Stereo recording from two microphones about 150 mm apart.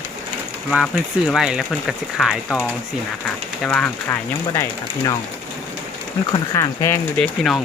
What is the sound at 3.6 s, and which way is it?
Speech, 5° left (ahead or behind).